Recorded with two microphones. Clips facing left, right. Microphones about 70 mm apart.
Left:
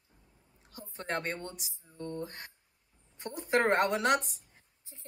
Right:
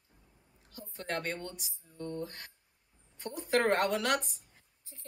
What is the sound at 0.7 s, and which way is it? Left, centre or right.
A woman's voice, left.